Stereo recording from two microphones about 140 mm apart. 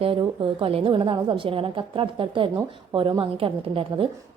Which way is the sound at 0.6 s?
40° right (ahead or behind).